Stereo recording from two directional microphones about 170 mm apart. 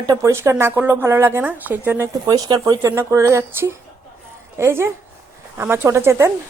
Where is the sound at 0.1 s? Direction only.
15° right (ahead or behind).